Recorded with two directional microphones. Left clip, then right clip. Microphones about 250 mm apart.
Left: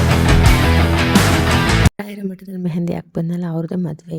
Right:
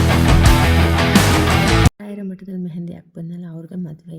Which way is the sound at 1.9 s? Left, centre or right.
Left.